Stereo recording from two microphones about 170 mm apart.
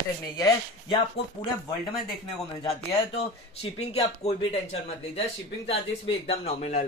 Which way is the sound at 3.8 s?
35° left (ahead or behind).